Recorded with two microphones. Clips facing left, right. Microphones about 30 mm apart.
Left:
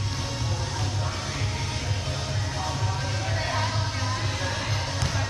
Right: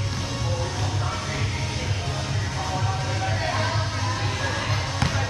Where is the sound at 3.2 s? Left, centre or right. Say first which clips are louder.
Right 3 dB; centre.